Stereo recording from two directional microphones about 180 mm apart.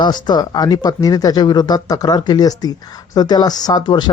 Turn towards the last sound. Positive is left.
turn(degrees=25)  # may be behind; listen again after turning